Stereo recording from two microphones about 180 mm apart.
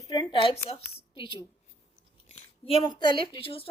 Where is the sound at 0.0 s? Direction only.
25° left (ahead or behind).